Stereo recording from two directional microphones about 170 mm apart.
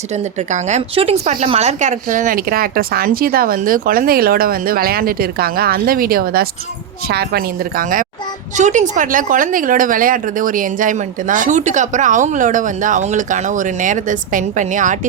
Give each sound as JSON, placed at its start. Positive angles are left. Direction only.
{"t": 0.1, "sound": "a woman's voice", "side_deg": -40}